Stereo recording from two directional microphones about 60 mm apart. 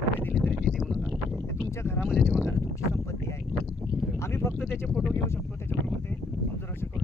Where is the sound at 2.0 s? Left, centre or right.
Centre.